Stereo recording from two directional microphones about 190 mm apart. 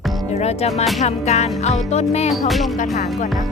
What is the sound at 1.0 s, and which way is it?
Music, 35° left (ahead or behind).